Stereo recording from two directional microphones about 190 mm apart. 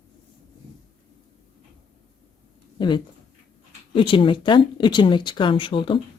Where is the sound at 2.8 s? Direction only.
25° left (ahead or behind).